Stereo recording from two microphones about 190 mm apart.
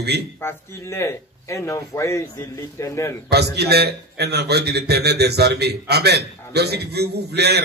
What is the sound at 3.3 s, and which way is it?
A man's voice, 60° right (ahead or behind).